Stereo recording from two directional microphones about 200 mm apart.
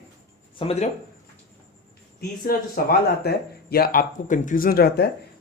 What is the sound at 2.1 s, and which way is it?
Speech, 50° left (ahead or behind).